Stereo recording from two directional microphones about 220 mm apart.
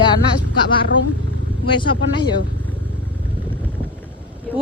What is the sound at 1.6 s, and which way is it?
Speech, 20° left (ahead or behind).